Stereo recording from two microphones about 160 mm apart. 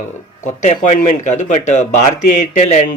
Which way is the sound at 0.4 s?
50° left (ahead or behind).